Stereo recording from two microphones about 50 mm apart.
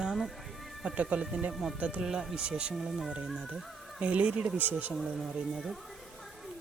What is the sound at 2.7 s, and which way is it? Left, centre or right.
Speech, centre.